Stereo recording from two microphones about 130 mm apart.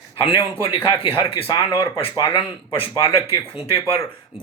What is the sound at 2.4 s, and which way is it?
Speech, 45° left (ahead or behind).